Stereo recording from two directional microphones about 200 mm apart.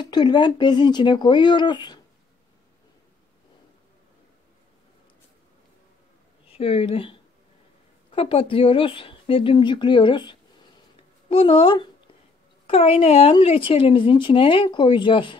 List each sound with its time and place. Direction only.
0.0 s speech: 20° left (ahead or behind)
6.5 s speech: 30° left (ahead or behind)